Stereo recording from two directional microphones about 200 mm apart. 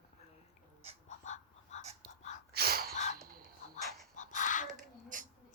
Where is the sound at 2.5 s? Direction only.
50° right (ahead or behind).